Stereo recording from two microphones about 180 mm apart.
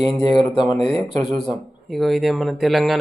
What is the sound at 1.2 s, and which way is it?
Speech, centre (ahead or behind).